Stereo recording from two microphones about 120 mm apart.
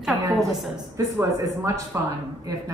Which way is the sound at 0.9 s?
25° right (ahead or behind).